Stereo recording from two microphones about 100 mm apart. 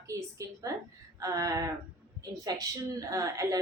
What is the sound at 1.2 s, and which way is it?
A woman's voice, 35° right (ahead or behind).